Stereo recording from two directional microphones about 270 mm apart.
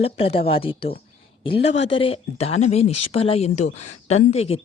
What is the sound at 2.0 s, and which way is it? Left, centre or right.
Speech, left.